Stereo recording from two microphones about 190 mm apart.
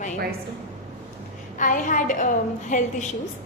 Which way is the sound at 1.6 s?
45° left (ahead or behind).